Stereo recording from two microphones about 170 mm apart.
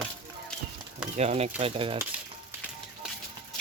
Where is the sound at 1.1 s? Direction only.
40° right (ahead or behind).